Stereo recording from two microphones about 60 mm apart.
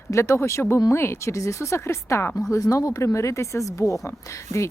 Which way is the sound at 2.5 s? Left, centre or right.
Left.